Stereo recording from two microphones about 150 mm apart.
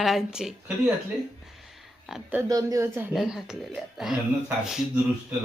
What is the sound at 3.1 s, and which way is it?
A woman's voice, centre (ahead or behind).